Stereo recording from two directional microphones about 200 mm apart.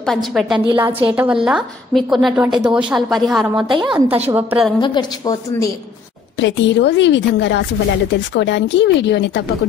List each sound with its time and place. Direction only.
0.0 s a woman's voice: centre (ahead or behind)
0.7 s a woman's voice: 15° right (ahead or behind)
4.7 s a woman's voice: 20° left (ahead or behind)
6.4 s a woman's voice: 60° left (ahead or behind)